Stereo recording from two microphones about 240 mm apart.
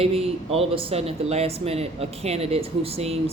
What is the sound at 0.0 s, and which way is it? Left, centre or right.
Speech, right.